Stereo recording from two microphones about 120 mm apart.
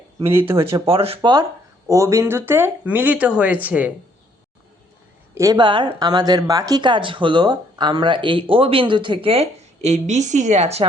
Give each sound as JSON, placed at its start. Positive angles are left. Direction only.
{"t": 0.2, "sound": "speech", "side_deg": -20}
{"t": 0.9, "sound": "speech", "side_deg": -55}
{"t": 1.9, "sound": "speech", "side_deg": -25}
{"t": 5.3, "sound": "speech", "side_deg": -25}
{"t": 5.5, "sound": "speech", "side_deg": -40}